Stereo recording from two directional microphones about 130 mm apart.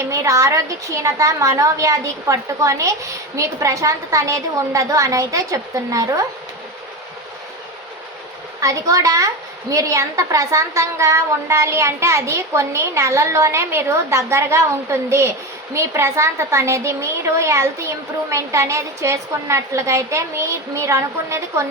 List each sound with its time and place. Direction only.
0.1 s a woman's voice: 25° right (ahead or behind)
8.6 s a woman's voice: 25° right (ahead or behind)